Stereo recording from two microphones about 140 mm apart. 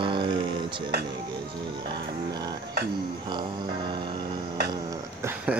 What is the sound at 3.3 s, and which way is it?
Speech, 35° right (ahead or behind).